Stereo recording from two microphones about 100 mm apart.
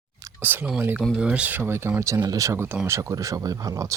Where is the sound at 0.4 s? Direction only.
20° right (ahead or behind).